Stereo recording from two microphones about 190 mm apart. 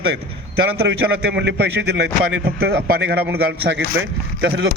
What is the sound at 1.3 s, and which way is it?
A man's voice, 65° right (ahead or behind).